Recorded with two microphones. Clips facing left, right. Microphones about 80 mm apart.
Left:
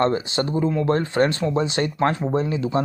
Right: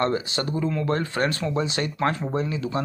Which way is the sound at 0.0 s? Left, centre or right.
Left.